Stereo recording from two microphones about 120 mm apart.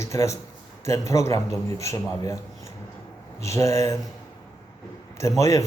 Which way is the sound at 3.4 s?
25° left (ahead or behind).